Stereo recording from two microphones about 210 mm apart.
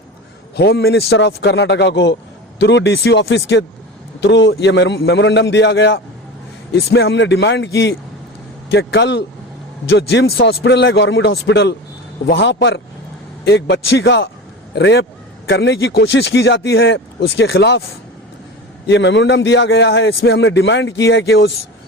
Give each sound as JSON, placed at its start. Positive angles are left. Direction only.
{"t": 0.5, "sound": "a man's voice", "side_deg": 50}
{"t": 18.9, "sound": "a man's voice", "side_deg": 55}